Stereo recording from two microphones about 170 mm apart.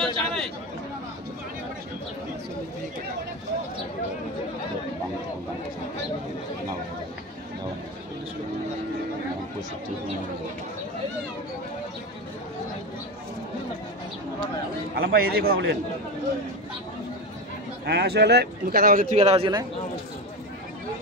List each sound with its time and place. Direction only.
0.0 s a sound: 5° left (ahead or behind)
15.0 s a man's voice: 65° right (ahead or behind)
17.8 s a man's voice: 75° right (ahead or behind); by 19.1 s 55° right (ahead or behind)
19.1 s a man's voice: 35° right (ahead or behind)